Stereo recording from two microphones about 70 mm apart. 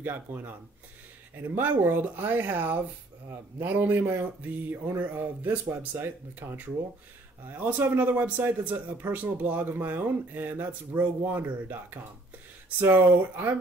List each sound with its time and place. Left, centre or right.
0.0 s speech: right